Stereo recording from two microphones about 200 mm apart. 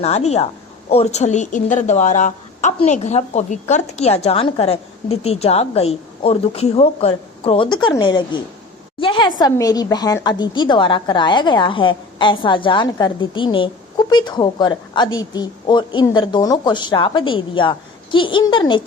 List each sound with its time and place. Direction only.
0.0 s a woman's voice: 30° left (ahead or behind)